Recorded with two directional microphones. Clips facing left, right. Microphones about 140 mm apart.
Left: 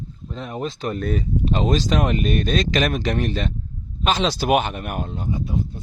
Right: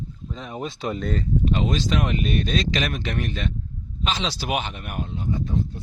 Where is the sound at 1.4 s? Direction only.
35° left (ahead or behind).